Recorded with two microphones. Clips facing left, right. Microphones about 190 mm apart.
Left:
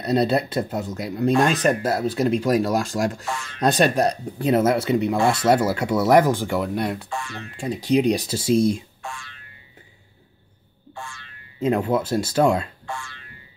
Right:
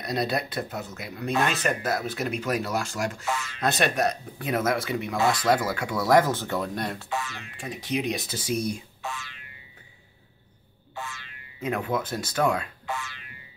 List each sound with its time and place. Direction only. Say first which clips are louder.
0.0 s speech: left 7 dB; 30° left (ahead or behind); by 7.1 s 10° left (ahead or behind)
7.1 s speech: even; 5° right (ahead or behind)
7.5 s speech: left 10 dB; 30° left (ahead or behind)
9.0 s boing: even; 5° right (ahead or behind)
11.6 s speech: left 7 dB; 30° left (ahead or behind)
12.8 s speech: even; 5° right (ahead or behind)